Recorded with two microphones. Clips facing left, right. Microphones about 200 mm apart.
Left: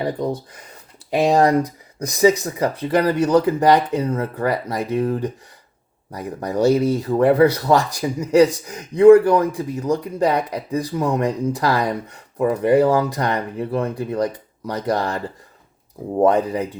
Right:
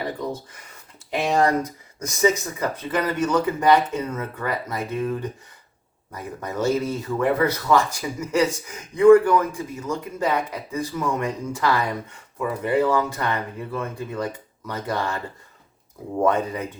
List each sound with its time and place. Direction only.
1.1 s speech: 35° left (ahead or behind)
16.2 s speech: 35° left (ahead or behind)